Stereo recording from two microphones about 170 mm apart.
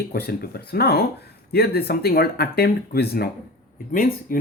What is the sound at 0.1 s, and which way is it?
Speech, 65° left (ahead or behind).